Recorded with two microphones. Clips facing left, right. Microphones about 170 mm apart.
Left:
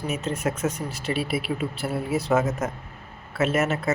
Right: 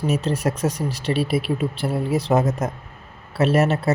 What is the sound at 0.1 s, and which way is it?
Speech, 35° right (ahead or behind).